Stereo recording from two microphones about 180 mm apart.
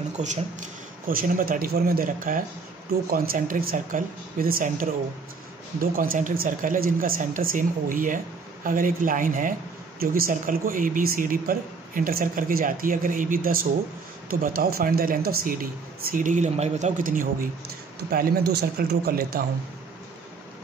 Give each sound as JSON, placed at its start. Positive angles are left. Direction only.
{"t": 0.2, "sound": "speech", "side_deg": -40}